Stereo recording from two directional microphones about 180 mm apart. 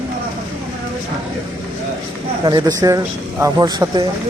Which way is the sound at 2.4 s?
20° right (ahead or behind).